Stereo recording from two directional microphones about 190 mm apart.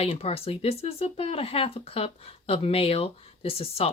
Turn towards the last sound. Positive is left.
turn(degrees=30)  # may be behind; listen again after turning